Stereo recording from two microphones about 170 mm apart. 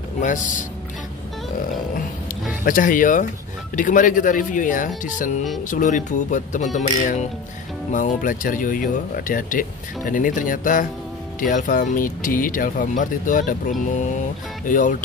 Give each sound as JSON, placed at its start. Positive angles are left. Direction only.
{"t": 0.2, "sound": "speech", "side_deg": 50}
{"t": 2.6, "sound": "speech", "side_deg": 55}